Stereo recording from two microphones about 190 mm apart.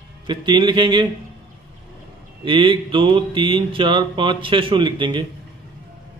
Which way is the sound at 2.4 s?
25° right (ahead or behind).